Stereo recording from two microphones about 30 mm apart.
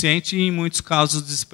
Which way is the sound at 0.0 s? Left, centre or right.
Right.